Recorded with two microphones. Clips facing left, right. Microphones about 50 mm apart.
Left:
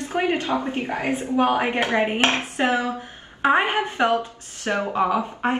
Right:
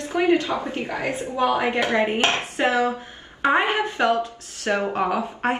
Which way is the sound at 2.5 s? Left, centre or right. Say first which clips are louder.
Right 1 dB; left.